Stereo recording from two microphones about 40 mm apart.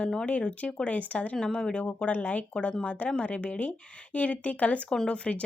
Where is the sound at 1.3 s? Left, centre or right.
Centre.